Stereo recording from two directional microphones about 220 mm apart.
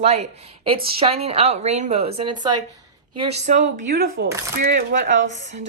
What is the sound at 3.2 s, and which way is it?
Speech, 30° right (ahead or behind).